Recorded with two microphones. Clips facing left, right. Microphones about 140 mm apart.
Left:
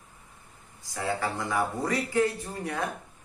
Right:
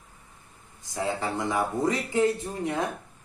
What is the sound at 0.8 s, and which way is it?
Speech, 20° right (ahead or behind).